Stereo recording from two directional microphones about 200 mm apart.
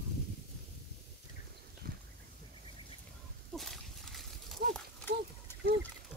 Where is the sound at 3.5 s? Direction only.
Centre (ahead or behind).